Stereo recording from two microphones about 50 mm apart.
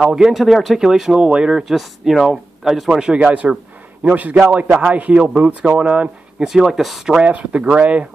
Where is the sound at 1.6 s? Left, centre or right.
Centre.